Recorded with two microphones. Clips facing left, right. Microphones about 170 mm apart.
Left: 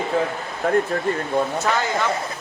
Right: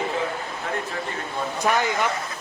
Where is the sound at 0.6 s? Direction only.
50° left (ahead or behind).